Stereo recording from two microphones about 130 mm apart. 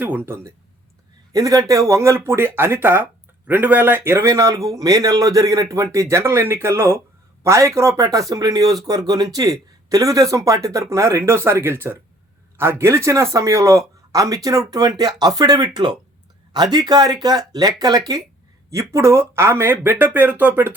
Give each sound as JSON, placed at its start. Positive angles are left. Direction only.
{"t": 0.0, "sound": "speech", "side_deg": -15}
{"t": 1.3, "sound": "speech", "side_deg": -25}